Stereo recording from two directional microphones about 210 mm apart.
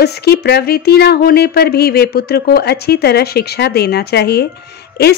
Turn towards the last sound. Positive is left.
turn(degrees=50)  # may be behind; listen again after turning